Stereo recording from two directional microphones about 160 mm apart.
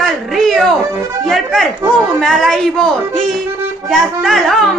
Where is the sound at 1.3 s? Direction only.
Centre (ahead or behind).